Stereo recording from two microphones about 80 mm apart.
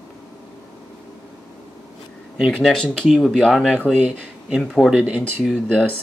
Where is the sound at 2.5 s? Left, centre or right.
Centre.